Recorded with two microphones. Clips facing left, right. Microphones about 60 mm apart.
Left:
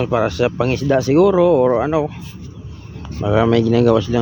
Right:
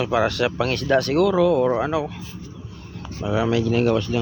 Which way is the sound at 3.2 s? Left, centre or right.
Left.